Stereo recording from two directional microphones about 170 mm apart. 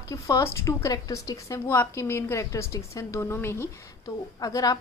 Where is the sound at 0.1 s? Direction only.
15° left (ahead or behind).